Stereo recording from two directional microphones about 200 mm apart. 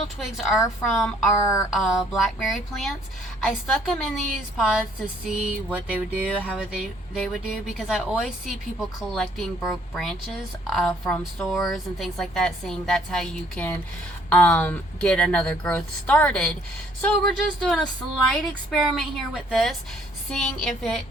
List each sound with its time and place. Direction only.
0.3 s a woman's voice: centre (ahead or behind)